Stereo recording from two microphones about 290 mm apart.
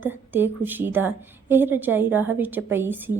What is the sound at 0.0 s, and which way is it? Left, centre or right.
A woman's voice, centre.